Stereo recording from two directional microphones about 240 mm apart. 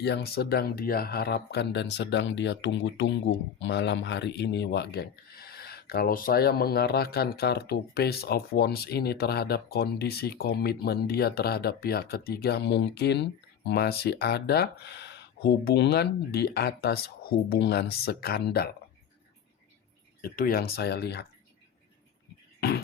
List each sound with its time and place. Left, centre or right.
0.0 s speech: left
20.2 s speech: left
22.6 s beatboxing: left